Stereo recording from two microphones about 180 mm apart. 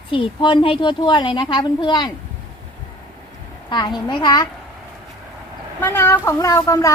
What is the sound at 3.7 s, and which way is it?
Speech, 25° left (ahead or behind).